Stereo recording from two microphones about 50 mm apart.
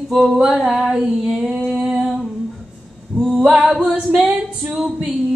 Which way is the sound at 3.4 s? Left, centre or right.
Centre.